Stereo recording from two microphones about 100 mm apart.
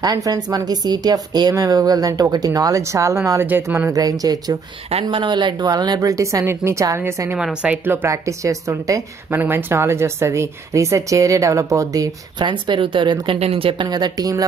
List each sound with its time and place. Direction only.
0.0 s speech: 40° right (ahead or behind); by 3.9 s 20° right (ahead or behind)
3.9 s speech: 40° right (ahead or behind)
5.1 s speech: 50° right (ahead or behind); by 7.3 s 25° right (ahead or behind)
7.3 s speech: 10° right (ahead or behind); by 9.0 s 35° right (ahead or behind)
9.3 s speech: 20° right (ahead or behind)
12.4 s speech: 50° right (ahead or behind)
13.4 s speech: 75° right (ahead or behind)
13.8 s speech: 45° right (ahead or behind)